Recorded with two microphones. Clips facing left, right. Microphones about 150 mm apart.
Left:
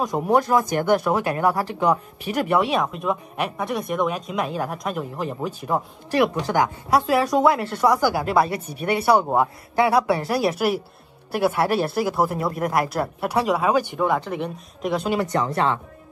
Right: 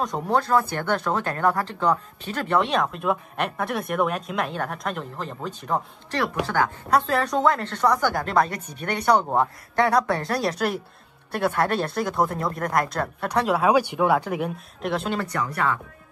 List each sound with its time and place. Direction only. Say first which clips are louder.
0.0 s speech: left 4 dB; 10° left (ahead or behind)
15.2 s speech: left 4 dB; 25° left (ahead or behind)